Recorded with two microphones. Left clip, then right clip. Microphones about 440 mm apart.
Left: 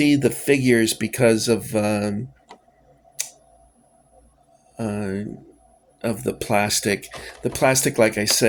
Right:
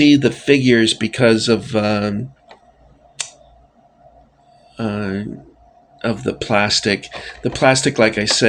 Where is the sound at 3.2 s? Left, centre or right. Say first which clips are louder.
Right 4 dB; left.